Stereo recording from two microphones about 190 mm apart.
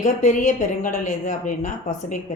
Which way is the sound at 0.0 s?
40° left (ahead or behind).